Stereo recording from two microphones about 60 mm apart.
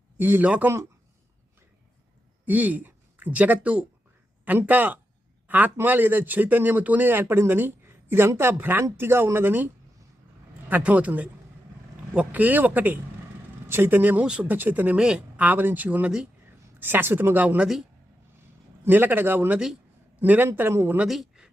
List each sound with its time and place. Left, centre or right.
0.2 s speech: right
0.4 s speech: right
2.5 s a man's voice: right
14.9 s speech: centre
15.4 s speech: right
18.9 s a man's voice: right
21.1 s a sound: centre